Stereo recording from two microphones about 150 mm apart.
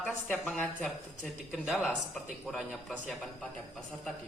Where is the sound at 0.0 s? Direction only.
10° left (ahead or behind).